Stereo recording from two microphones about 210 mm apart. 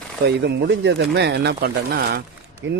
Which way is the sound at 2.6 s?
60° right (ahead or behind).